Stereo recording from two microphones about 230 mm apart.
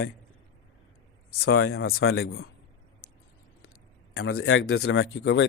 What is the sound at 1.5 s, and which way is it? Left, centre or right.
Speech, left.